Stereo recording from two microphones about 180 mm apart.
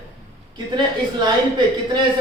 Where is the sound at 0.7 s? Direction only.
25° right (ahead or behind).